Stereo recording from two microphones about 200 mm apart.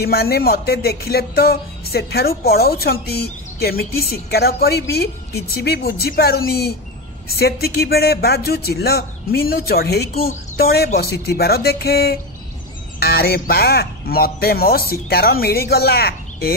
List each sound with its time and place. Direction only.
0.0 s music: 50° left (ahead or behind)